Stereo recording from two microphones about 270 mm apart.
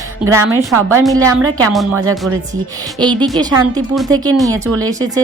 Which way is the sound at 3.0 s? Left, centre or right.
Centre.